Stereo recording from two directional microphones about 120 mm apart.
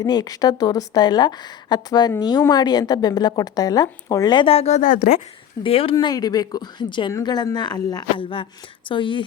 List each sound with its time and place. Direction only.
0.0 s a woman's voice: 35° left (ahead or behind); by 4.9 s 80° left
5.6 s a woman's voice: 50° left (ahead or behind)